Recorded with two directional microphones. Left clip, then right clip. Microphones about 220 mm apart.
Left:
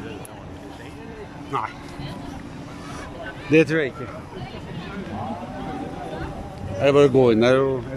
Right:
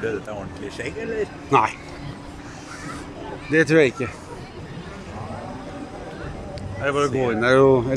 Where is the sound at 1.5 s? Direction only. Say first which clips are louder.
Right 9 dB; 15° right (ahead or behind).